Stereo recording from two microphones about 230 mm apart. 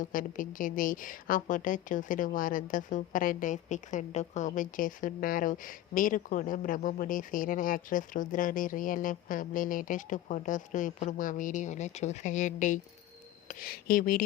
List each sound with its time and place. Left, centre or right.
0.0 s a woman's voice: left